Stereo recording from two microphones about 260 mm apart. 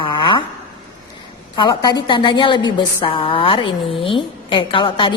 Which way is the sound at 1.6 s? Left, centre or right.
Centre.